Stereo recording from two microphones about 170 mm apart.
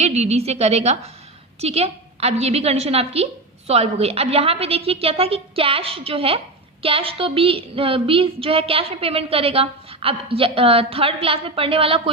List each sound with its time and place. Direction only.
0.0 s a woman's voice: 40° right (ahead or behind)